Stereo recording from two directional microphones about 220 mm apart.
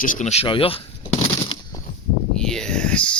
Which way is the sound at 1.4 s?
25° left (ahead or behind).